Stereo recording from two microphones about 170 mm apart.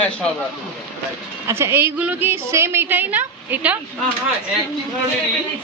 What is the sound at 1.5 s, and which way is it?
A woman's voice, 15° right (ahead or behind).